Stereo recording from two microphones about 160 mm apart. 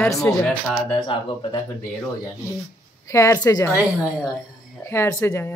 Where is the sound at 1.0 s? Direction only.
30° left (ahead or behind).